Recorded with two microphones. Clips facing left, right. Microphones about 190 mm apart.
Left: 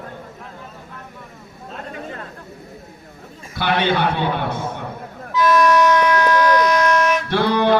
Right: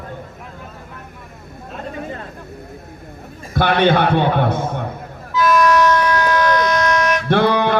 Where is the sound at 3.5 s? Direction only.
50° right (ahead or behind).